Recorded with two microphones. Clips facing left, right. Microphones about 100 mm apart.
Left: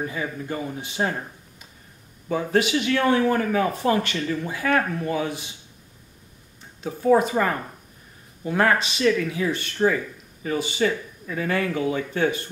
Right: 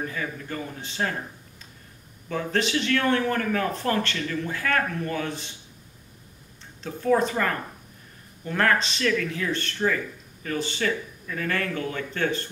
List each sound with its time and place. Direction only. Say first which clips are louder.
0.0 s speech: left 3 dB; 15° left (ahead or behind)
2.2 s speech: left 4 dB; 15° left (ahead or behind)
6.8 s speech: left 4 dB; 10° left (ahead or behind)